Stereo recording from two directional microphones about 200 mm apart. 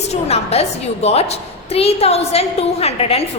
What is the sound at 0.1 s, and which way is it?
A woman's voice, 30° left (ahead or behind).